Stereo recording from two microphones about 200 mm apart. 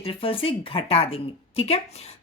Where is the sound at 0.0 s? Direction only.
30° left (ahead or behind).